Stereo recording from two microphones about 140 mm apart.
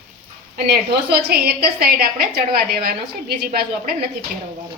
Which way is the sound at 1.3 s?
90° right.